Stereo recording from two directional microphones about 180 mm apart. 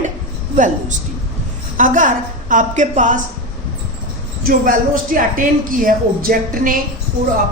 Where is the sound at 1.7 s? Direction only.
45° right (ahead or behind).